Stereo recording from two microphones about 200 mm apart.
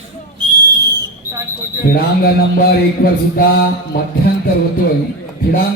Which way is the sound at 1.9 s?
45° left (ahead or behind).